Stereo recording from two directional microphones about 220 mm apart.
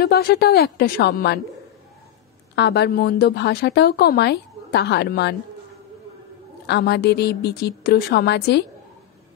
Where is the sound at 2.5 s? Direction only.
50° left (ahead or behind).